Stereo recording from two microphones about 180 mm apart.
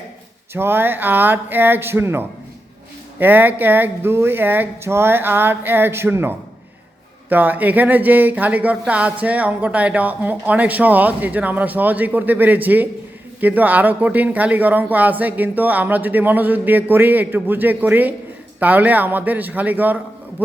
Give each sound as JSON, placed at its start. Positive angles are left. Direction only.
{"t": 0.5, "sound": "speech", "side_deg": -10}